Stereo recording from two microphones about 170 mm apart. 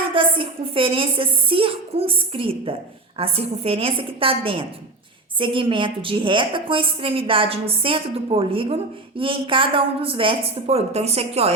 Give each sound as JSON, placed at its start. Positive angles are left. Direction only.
{"t": 0.1, "sound": "a woman's voice", "side_deg": -30}